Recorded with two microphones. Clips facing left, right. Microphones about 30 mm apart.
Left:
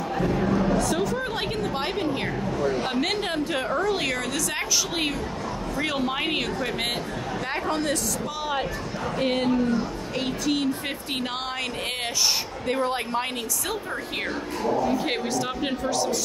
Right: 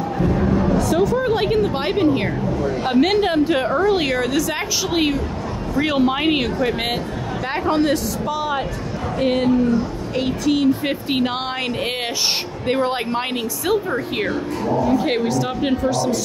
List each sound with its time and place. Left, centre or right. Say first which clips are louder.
0.7 s a woman's voice: right 7 dB; centre; by 8.0 s right
8.3 s a woman's voice: right 7 dB; centre
10.9 s a woman's voice: right 9 dB; centre
12.3 s a woman's voice: right 5 dB; right; by 16.2 s centre